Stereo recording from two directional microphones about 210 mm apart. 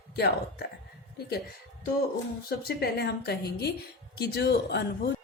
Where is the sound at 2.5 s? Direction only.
50° left (ahead or behind).